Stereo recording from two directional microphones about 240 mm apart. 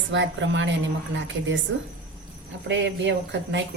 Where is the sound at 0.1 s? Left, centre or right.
Right.